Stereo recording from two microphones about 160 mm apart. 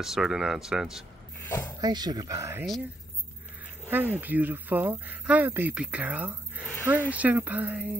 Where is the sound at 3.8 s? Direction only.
10° right (ahead or behind).